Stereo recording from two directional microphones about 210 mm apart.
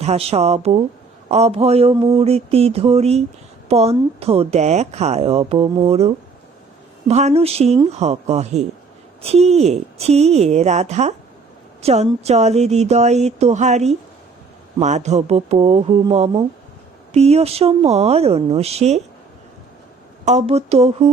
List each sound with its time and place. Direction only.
0.0 s speech: 30° right (ahead or behind)
20.2 s speech: 30° right (ahead or behind)